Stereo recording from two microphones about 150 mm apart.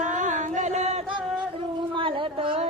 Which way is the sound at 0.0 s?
55° right (ahead or behind).